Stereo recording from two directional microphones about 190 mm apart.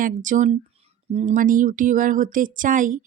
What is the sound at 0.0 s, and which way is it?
Speech, 45° right (ahead or behind).